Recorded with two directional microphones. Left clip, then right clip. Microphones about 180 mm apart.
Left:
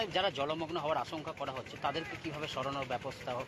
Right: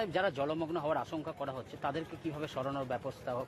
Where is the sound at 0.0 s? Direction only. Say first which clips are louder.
Even; 60° right (ahead or behind).